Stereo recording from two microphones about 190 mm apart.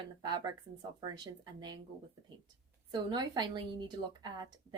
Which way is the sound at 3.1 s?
20° right (ahead or behind).